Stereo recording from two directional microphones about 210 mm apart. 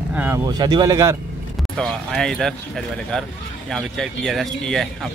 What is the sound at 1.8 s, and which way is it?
Speech, centre (ahead or behind).